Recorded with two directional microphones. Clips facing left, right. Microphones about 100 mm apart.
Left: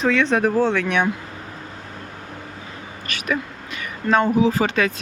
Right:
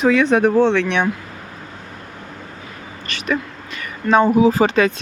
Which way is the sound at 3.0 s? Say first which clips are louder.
Right 3 dB; 5° left (ahead or behind).